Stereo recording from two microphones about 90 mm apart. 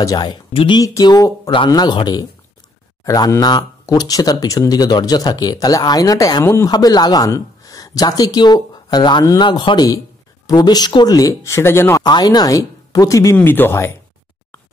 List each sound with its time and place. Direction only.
0.0 s speech: 50° left (ahead or behind)
0.5 s speech: 85° left
0.7 s speech: 45° left (ahead or behind)
3.1 s speech: 40° left (ahead or behind)
6.7 s a woman's voice: 50° left (ahead or behind)
9.8 s a sound: 40° left (ahead or behind)
10.5 s speech: 50° left (ahead or behind); by 12.0 s 30° left (ahead or behind)
12.0 s speech: 50° left (ahead or behind); by 13.9 s 25° left (ahead or behind)